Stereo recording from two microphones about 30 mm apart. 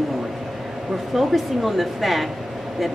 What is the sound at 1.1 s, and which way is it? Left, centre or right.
A woman's voice, centre.